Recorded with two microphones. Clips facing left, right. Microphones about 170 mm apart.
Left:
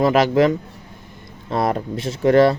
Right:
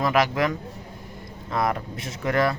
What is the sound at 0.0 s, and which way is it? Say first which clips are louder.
Speech: left 7 dB; 30° left (ahead or behind).